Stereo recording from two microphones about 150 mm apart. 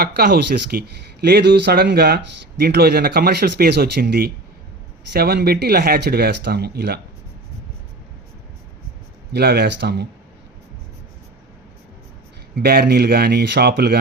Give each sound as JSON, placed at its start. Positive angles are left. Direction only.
{"t": 0.0, "sound": "speech", "side_deg": -90}
{"t": 9.3, "sound": "speech", "side_deg": -90}
{"t": 12.5, "sound": "speech", "side_deg": -90}